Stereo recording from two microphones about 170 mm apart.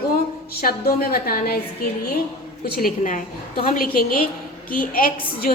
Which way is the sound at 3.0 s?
50° left (ahead or behind).